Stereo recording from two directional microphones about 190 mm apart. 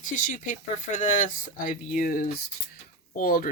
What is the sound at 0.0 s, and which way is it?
Speech, 45° left (ahead or behind).